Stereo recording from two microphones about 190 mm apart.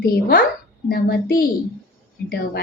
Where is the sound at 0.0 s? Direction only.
50° left (ahead or behind).